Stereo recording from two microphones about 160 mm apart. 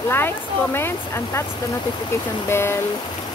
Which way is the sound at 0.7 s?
15° left (ahead or behind).